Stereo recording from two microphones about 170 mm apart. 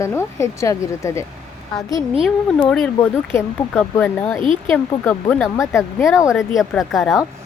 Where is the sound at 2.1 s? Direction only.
5° right (ahead or behind).